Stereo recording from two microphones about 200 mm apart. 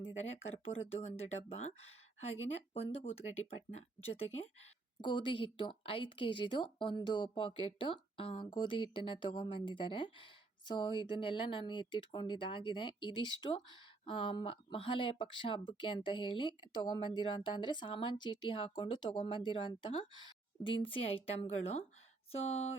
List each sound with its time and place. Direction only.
0.0 s speech: 30° left (ahead or behind)